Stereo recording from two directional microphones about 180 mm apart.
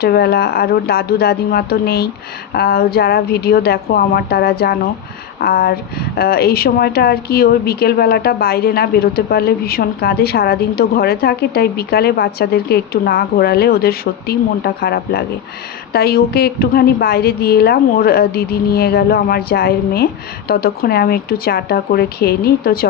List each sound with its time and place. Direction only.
0.0 s speech: 60° left (ahead or behind)